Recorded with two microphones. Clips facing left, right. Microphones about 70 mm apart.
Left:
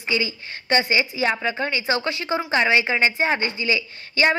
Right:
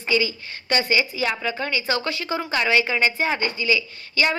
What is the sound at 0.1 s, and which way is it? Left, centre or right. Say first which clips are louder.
A woman's voice: right 2 dB; left.